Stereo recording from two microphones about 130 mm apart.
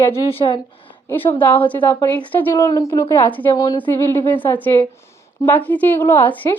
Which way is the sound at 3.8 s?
15° left (ahead or behind).